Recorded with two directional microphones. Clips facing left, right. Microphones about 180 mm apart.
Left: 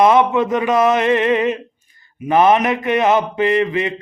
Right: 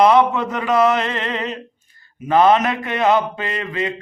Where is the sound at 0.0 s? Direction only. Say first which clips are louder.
Left 1 dB; 20° left (ahead or behind).